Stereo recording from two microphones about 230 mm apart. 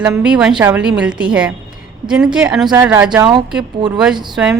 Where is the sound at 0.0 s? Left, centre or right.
Centre.